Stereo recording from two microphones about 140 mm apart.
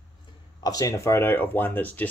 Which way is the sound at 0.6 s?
25° left (ahead or behind).